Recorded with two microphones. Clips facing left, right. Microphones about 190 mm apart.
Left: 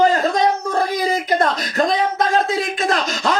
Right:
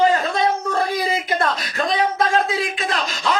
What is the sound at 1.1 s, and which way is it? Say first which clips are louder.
Speech: left 3 dB; 45° left (ahead or behind).